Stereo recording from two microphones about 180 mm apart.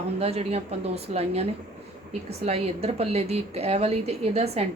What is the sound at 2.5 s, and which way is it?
A woman's voice, 35° right (ahead or behind).